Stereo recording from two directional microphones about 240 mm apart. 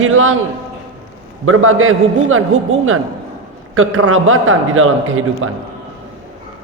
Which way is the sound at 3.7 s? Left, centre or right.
Right.